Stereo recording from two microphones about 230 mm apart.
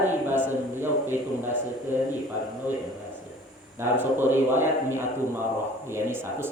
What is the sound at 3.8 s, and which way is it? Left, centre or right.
A man's voice, centre.